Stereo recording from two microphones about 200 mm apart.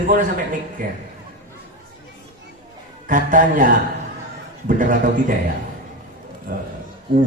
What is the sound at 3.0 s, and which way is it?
A man's voice, 40° right (ahead or behind).